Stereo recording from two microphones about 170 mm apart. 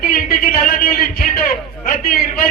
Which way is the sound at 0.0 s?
55° left (ahead or behind).